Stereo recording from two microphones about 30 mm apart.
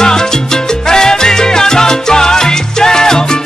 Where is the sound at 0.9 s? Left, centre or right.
Left.